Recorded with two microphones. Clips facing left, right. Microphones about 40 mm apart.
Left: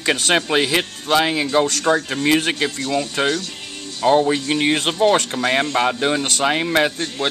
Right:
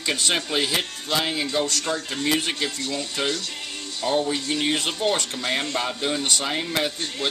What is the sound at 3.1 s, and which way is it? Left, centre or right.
Speech, left.